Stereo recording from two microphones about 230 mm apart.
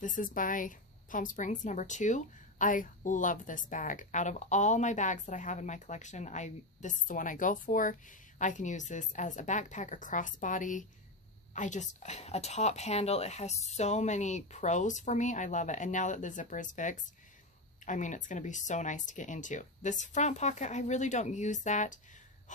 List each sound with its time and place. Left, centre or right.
0.0 s a woman's voice: left